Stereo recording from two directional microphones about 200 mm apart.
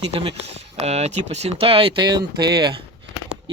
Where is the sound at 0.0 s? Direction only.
30° right (ahead or behind).